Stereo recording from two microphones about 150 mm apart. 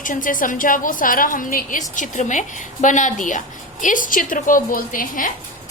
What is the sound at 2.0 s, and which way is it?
A woman's voice, 55° left (ahead or behind).